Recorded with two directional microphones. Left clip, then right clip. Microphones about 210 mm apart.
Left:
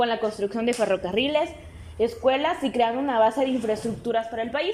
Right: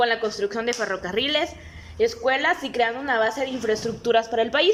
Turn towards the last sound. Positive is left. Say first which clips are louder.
# right 5 dB
turn(degrees=-10)  # may be behind; listen again after turning